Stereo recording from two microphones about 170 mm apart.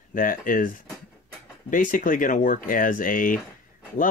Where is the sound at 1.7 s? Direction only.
50° left (ahead or behind).